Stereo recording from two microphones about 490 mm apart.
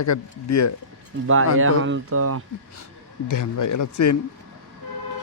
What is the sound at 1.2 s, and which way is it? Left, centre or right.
Speech, right.